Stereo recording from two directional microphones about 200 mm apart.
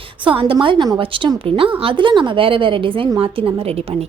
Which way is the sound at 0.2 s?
25° right (ahead or behind).